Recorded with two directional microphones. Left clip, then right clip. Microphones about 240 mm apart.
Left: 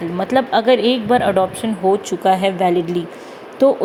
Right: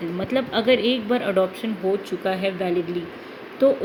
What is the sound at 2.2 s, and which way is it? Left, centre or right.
Speech, left.